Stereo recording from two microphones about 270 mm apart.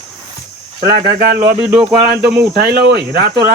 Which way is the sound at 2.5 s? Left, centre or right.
Right.